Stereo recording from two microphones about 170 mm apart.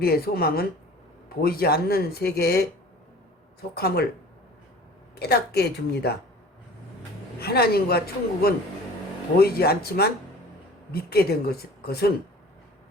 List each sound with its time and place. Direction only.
0.0 s a woman's voice: 65° left (ahead or behind)
5.2 s speech: 70° left (ahead or behind)
7.3 s a woman's voice: 65° left (ahead or behind)